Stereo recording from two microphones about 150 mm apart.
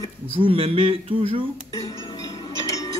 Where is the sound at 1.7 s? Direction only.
25° left (ahead or behind).